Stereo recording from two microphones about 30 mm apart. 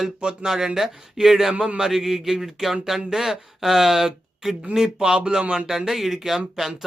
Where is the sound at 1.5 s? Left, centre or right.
Right.